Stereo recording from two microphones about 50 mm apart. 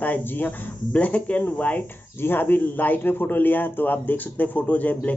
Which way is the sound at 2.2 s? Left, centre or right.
Left.